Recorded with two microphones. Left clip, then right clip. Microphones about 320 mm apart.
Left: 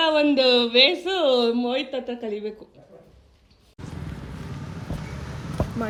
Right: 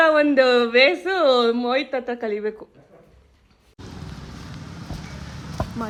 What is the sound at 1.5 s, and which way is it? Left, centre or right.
Speech, centre.